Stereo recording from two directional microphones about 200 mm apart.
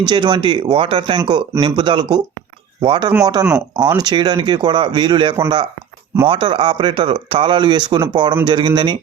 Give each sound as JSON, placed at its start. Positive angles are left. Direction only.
{"t": 0.1, "sound": "speech", "side_deg": -20}